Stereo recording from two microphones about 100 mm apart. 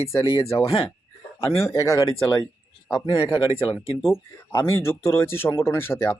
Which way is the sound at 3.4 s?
60° left (ahead or behind).